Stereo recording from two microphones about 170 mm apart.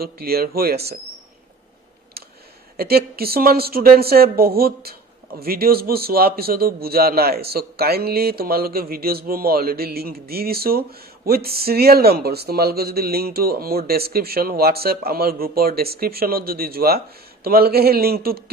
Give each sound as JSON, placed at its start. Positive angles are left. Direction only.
{"t": 0.0, "sound": "speech", "side_deg": -65}
{"t": 2.7, "sound": "speech", "side_deg": -65}